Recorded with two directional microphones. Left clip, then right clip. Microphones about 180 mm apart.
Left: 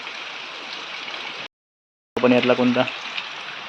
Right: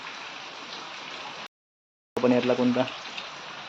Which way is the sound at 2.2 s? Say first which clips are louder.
Left 6 dB; 15° left (ahead or behind).